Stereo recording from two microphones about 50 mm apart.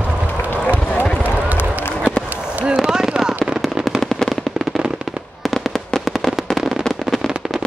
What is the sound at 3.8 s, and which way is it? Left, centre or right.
Fireworks, centre.